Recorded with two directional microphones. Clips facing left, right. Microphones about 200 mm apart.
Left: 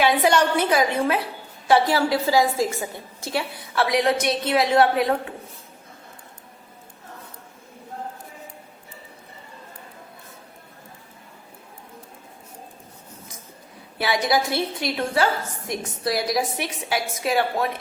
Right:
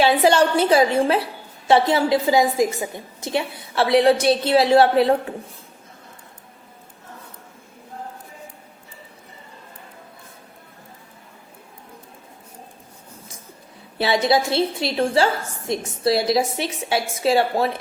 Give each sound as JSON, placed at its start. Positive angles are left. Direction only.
{"t": 0.0, "sound": "a woman's voice", "side_deg": -30}
{"t": 14.0, "sound": "a woman's voice", "side_deg": -25}